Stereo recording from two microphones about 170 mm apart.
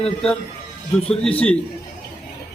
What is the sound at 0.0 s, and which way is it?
Speech, 5° left (ahead or behind).